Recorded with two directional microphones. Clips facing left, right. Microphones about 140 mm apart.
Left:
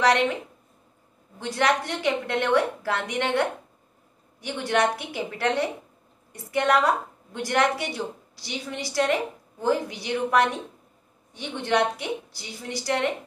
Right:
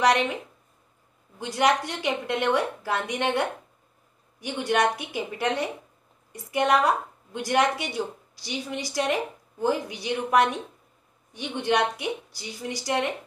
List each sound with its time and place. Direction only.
1.4 s a woman's voice: 15° right (ahead or behind)